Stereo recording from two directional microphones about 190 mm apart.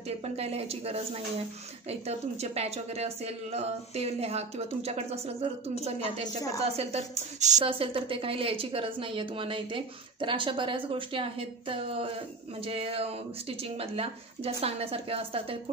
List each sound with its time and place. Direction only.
0.2 s a woman's voice: 30° right (ahead or behind)
6.6 s a woman's voice: 30° right (ahead or behind)